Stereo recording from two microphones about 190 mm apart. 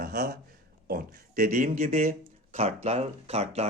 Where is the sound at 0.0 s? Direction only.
55° right (ahead or behind).